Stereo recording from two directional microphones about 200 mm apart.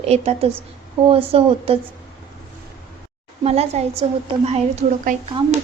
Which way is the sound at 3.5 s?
30° right (ahead or behind).